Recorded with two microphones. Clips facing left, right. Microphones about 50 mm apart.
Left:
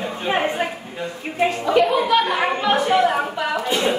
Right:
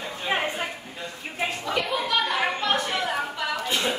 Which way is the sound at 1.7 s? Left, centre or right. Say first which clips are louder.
Left 10 dB; centre.